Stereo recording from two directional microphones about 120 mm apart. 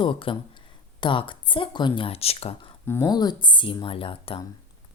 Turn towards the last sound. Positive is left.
turn(degrees=50)  # may be behind; listen again after turning